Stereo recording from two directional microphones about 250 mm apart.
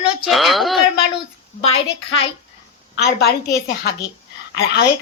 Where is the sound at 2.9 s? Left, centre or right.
Left.